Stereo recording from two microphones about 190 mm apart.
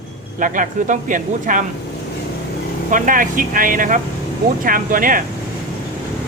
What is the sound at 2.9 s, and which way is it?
Speech, 45° right (ahead or behind).